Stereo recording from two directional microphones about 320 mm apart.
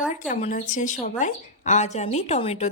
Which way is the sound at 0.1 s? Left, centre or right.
Left.